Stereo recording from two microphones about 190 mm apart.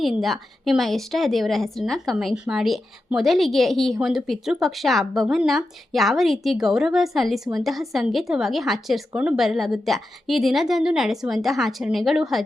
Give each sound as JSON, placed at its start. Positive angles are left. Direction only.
{"t": 0.0, "sound": "a woman's voice", "side_deg": 0}